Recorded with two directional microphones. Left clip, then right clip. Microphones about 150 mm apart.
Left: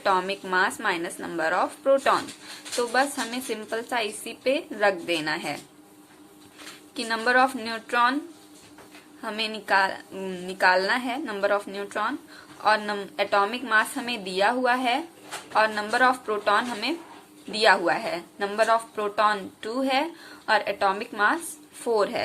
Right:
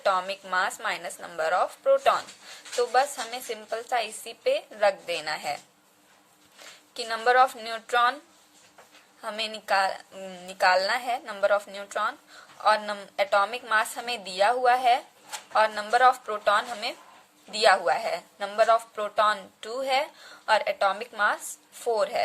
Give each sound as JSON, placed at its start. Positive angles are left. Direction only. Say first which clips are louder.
{"t": 0.0, "sound": "a woman's voice", "louder": "left 2 dB", "side_deg": -30}
{"t": 6.9, "sound": "a woman's voice", "louder": "even", "side_deg": -35}
{"t": 9.2, "sound": "a woman's voice", "louder": "left 2 dB", "side_deg": -40}